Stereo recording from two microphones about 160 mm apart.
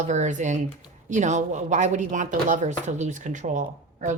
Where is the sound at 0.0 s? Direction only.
50° right (ahead or behind).